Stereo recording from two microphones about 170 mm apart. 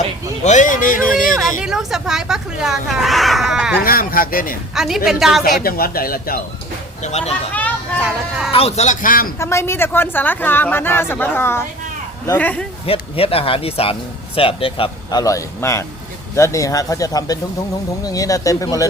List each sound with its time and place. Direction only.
0.4 s speech: 45° left (ahead or behind)
1.6 s speech: centre (ahead or behind)
3.8 s speech: 60° left (ahead or behind)
4.7 s speech: 5° right (ahead or behind)
5.4 s speech: 60° left (ahead or behind)
7.0 s speech: 40° left (ahead or behind)
8.5 s speech: 40° left (ahead or behind); by 9.3 s 55° left (ahead or behind)
9.4 s a woman's voice: 15° left (ahead or behind)
12.8 s speech: 35° left (ahead or behind)
15.2 s a woman's voice: 20° left (ahead or behind)